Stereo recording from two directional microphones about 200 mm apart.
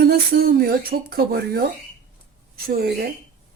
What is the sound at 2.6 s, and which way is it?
Speech, 50° right (ahead or behind).